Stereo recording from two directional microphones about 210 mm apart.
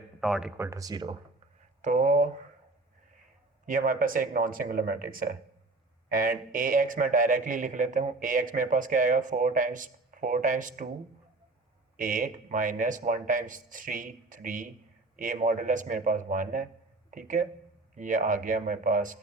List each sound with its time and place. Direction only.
0.2 s speech: centre (ahead or behind); by 1.1 s 20° right (ahead or behind)
1.8 s speech: 40° right (ahead or behind)
3.7 s speech: 40° right (ahead or behind)
11.9 s speech: 40° right (ahead or behind)